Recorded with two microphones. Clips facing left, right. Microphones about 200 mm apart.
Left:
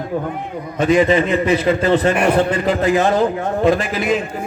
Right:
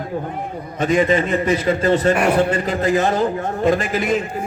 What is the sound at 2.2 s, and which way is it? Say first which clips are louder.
Speech: left 1 dB; 10° right (ahead or behind).